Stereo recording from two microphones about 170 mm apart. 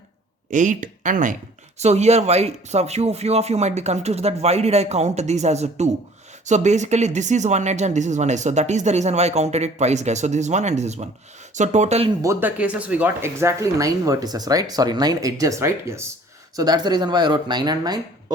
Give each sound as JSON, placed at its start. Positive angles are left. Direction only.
{"t": 0.5, "sound": "speech", "side_deg": -50}
{"t": 12.2, "sound": "speech", "side_deg": -15}